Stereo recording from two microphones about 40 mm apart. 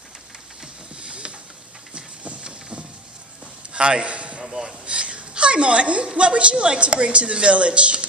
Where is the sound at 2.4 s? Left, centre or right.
Right.